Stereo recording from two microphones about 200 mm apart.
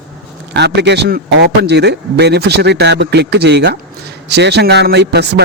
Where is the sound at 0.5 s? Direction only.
60° right (ahead or behind).